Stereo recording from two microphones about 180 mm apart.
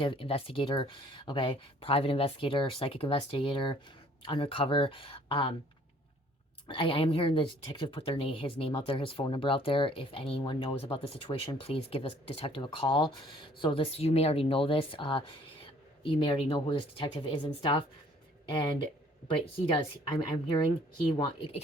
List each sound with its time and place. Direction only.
0.0 s speech: 30° left (ahead or behind)
6.7 s speech: 30° left (ahead or behind)
15.6 s a sound: 30° left (ahead or behind)
16.5 s speech: 30° left (ahead or behind)